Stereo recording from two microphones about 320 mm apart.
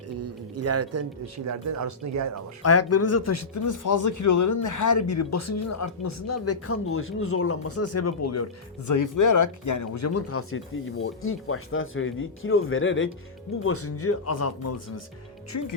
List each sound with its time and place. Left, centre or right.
0.2 s speech: right
2.6 s a man's voice: left
8.9 s a man's voice: left